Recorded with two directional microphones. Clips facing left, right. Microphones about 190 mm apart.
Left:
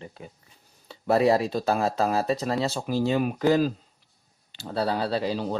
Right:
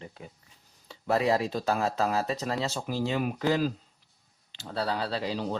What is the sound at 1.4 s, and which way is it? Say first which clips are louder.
Speech: left 3 dB; 35° left (ahead or behind).